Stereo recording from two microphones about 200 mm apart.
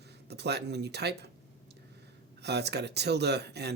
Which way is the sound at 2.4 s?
55° right (ahead or behind).